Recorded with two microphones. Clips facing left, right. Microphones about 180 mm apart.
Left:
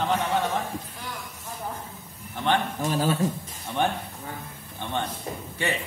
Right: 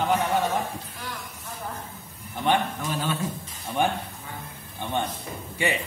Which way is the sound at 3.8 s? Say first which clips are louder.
Right 1 dB; 10° right (ahead or behind).